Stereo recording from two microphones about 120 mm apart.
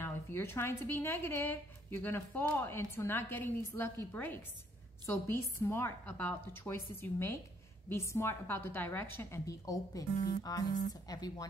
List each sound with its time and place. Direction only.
0.0 s a woman's voice: 20° left (ahead or behind)